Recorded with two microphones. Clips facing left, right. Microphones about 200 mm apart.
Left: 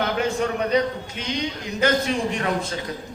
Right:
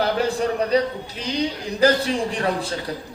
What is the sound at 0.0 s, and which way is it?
A man's voice, 35° right (ahead or behind).